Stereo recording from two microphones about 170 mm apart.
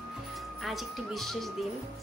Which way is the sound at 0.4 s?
Centre (ahead or behind).